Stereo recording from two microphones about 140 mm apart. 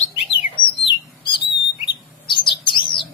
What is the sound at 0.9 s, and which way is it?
Bird, 35° left (ahead or behind).